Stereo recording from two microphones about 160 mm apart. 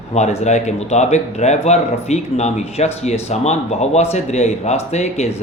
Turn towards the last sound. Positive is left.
turn(degrees=40)  # may be behind; listen again after turning